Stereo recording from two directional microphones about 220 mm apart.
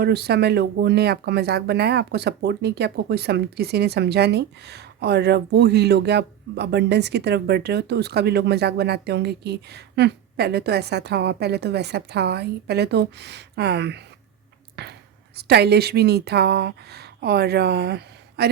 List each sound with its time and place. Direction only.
0.0 s speech: 45° right (ahead or behind)